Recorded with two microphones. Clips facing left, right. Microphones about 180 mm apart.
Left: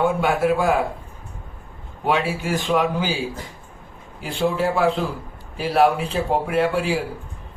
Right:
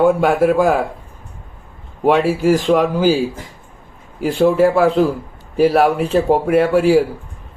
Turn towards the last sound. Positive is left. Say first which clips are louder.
# right 8 dB
turn(degrees=-45)  # may be behind; listen again after turning